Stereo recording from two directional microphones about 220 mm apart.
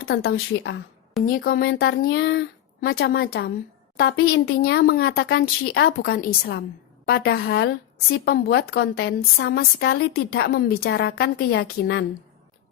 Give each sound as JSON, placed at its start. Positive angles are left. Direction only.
{"t": 0.0, "sound": "a woman's voice", "side_deg": 60}
{"t": 1.2, "sound": "a woman's voice", "side_deg": 45}